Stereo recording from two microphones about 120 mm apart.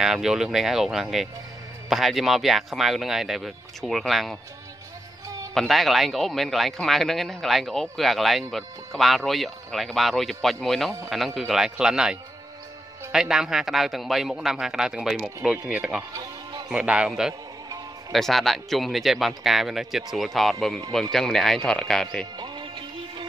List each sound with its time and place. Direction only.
0.0 s speech: 5° right (ahead or behind)
5.5 s a man's voice: centre (ahead or behind)
16.1 s music: 35° right (ahead or behind)
16.7 s a man's voice: 5° right (ahead or behind)
22.4 s music: 40° right (ahead or behind)